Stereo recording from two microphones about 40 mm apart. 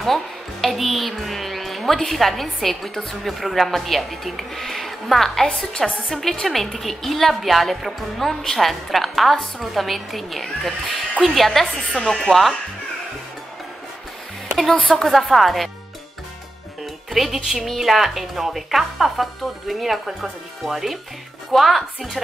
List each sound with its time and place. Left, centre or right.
0.0 s a woman's voice: centre
5.6 s a woman's voice: left
6.0 s a woman's voice: centre
14.7 s a woman's voice: left
15.0 s a woman's voice: centre
17.1 s a woman's voice: centre